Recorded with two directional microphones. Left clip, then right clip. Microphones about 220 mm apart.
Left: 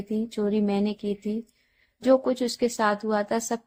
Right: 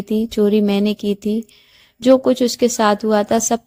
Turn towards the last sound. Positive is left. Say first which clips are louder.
# right 10 dB
turn(degrees=-35)  # may be behind; listen again after turning